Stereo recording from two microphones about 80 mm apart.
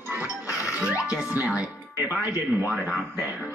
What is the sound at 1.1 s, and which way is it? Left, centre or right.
Speech, centre.